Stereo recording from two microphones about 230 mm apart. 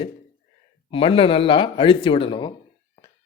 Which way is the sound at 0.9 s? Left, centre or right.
Left.